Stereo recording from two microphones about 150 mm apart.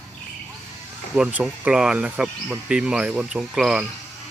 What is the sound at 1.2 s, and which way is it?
Speech, 5° right (ahead or behind).